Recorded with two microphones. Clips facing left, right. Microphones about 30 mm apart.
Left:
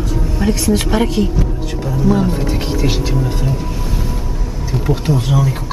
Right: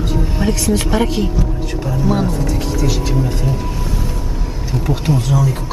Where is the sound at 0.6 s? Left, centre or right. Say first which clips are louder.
Left 1 dB; centre.